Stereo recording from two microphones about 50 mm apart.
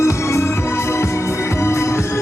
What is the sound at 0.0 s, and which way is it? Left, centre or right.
Music, left.